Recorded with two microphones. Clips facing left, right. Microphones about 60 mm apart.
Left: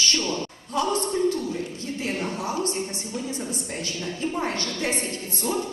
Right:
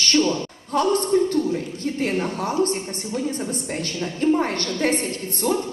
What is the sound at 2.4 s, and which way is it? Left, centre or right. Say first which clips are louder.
A woman's voice: right 5 dB; right.